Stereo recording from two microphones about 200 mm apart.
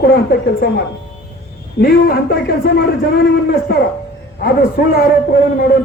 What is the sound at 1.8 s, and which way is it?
A man's voice, 50° left (ahead or behind).